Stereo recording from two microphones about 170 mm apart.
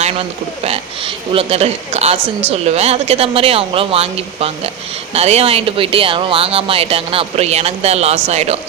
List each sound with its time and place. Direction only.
0.0 s speech: 35° right (ahead or behind)